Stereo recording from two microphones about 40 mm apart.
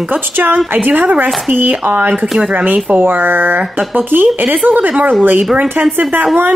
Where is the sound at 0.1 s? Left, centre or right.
Right.